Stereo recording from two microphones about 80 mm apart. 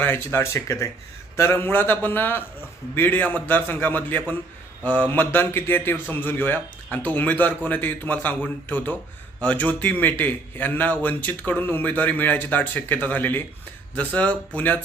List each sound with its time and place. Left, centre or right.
0.0 s a man's voice: left